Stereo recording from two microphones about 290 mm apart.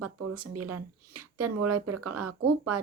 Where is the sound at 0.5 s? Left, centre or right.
Right.